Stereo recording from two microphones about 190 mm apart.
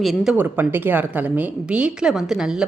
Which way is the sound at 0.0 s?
Centre (ahead or behind).